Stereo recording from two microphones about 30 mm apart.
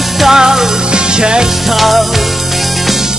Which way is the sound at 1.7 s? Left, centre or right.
Centre.